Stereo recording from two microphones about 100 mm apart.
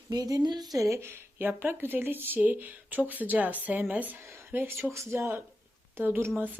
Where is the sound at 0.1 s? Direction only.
40° right (ahead or behind); by 4.2 s 15° right (ahead or behind).